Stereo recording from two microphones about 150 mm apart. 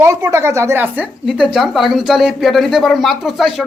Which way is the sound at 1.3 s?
Centre (ahead or behind).